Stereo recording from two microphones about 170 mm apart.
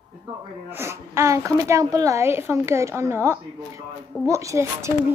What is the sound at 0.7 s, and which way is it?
Speech, 15° right (ahead or behind).